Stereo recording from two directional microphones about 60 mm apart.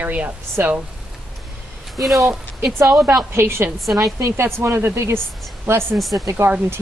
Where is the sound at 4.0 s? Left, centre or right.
Right.